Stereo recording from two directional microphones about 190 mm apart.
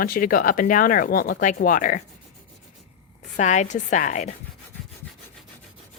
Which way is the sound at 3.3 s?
40° left (ahead or behind).